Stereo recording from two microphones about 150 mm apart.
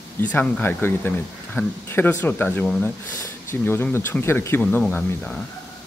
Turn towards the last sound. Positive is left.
turn(degrees=5)  # may be behind; listen again after turning